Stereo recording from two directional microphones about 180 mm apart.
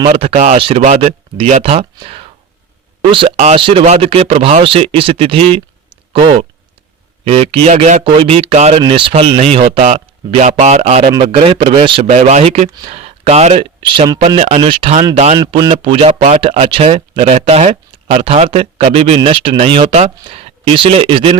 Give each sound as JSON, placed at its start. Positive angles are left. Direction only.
{"t": 0.1, "sound": "speech", "side_deg": -35}
{"t": 8.0, "sound": "speech", "side_deg": -30}
{"t": 9.6, "sound": "speech", "side_deg": -45}
{"t": 11.1, "sound": "speech", "side_deg": -25}
{"t": 12.0, "sound": "speech", "side_deg": -40}
{"t": 15.4, "sound": "speech", "side_deg": -20}
{"t": 15.7, "sound": "speech", "side_deg": -30}